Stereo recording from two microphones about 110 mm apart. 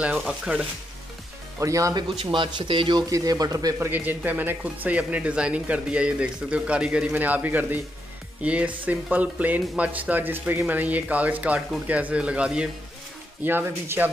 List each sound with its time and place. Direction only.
0.0 s speech: 5° right (ahead or behind)
1.6 s speech: 30° right (ahead or behind)
2.3 s speech: 50° right (ahead or behind)
3.1 s speech: 35° right (ahead or behind)
3.9 s speech: 15° right (ahead or behind)
13.4 s speech: 20° right (ahead or behind)